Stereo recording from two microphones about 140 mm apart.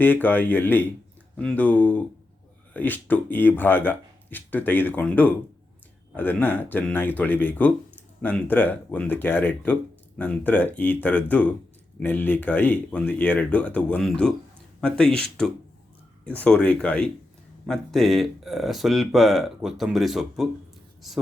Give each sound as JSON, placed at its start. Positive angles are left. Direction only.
{"t": 0.0, "sound": "speech", "side_deg": 15}